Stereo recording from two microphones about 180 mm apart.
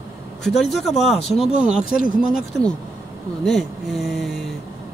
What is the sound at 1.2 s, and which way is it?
Speech, 35° left (ahead or behind).